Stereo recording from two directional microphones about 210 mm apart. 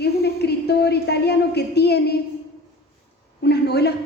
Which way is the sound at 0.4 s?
50° left (ahead or behind).